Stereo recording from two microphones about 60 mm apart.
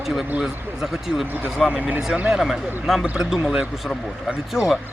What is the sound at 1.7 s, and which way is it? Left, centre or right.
Speech, right.